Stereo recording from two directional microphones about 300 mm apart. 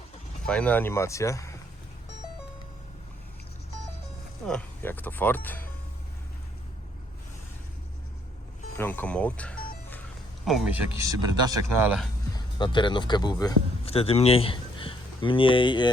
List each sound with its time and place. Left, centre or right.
0.4 s speech: centre
4.4 s speech: centre
8.8 s speech: centre
12.5 s speech: centre